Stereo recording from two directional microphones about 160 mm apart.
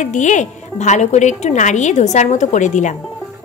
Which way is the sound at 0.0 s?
50° left (ahead or behind).